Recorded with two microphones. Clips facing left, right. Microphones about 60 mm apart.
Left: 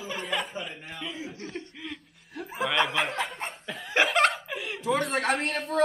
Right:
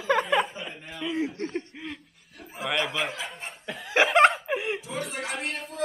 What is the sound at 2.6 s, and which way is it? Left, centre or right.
Speech, centre.